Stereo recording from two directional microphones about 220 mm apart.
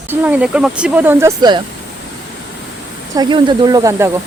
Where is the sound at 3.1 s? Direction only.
20° right (ahead or behind).